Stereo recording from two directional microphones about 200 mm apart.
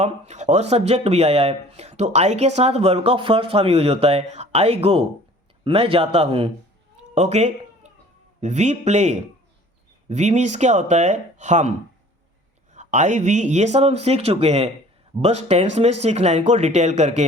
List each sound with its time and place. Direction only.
0.0 s speech: 35° right (ahead or behind)
7.1 s cat: 35° right (ahead or behind)
8.4 s speech: 35° right (ahead or behind)
12.7 s speech: 35° right (ahead or behind)